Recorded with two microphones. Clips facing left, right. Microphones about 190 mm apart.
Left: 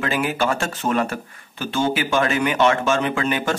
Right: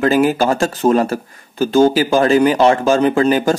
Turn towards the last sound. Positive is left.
turn(degrees=-35)  # may be behind; listen again after turning